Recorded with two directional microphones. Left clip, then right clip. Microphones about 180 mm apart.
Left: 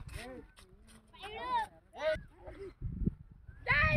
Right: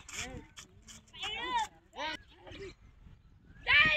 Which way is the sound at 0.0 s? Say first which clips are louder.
Right 5 dB; 50° left (ahead or behind).